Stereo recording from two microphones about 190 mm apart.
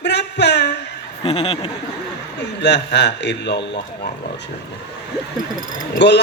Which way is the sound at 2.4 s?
65° left (ahead or behind).